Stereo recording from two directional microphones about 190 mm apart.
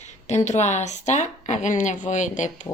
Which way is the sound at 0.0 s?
35° left (ahead or behind).